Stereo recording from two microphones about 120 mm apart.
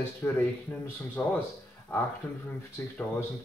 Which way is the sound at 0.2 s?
15° left (ahead or behind).